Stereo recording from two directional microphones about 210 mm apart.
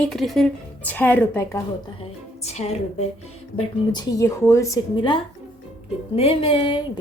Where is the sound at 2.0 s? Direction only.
30° left (ahead or behind).